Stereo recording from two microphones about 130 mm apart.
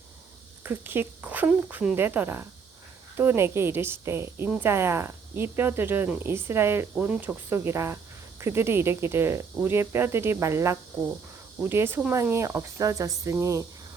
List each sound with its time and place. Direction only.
0.6 s a woman's voice: 15° right (ahead or behind)